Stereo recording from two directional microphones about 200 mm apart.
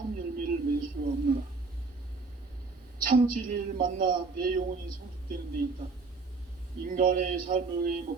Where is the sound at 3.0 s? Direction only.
45° right (ahead or behind).